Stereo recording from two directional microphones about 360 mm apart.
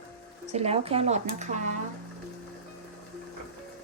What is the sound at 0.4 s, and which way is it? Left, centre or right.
Speech, centre.